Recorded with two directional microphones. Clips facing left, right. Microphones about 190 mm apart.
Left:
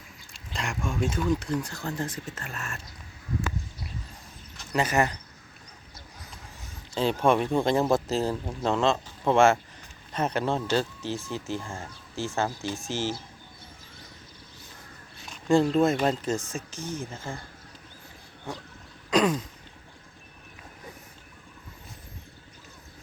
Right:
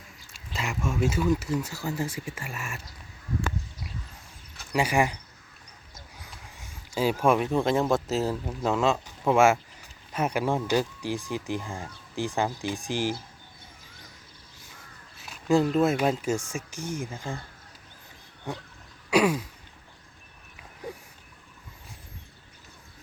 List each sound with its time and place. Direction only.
0.3 s speech: 5° right (ahead or behind)
4.5 s speech: 10° right (ahead or behind)
6.6 s speech: 10° right (ahead or behind)
15.2 s a sound: 5° right (ahead or behind)
15.7 s speech: 5° right (ahead or behind)
18.5 s speech: 15° right (ahead or behind)
19.1 s throat clearing: 10° right (ahead or behind)